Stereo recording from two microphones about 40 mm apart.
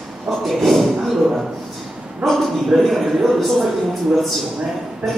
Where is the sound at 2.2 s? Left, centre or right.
Centre.